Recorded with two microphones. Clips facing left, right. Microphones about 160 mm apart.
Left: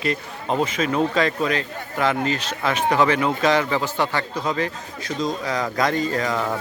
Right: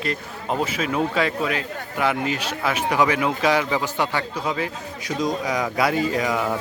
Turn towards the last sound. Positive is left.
turn(degrees=-10)  # may be behind; listen again after turning